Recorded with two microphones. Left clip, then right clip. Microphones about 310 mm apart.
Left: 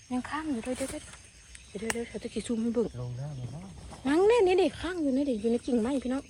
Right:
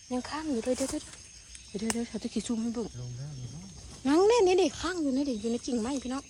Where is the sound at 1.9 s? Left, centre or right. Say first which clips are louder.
Even; right.